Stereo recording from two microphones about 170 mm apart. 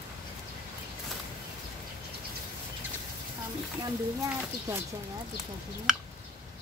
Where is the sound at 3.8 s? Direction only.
20° right (ahead or behind).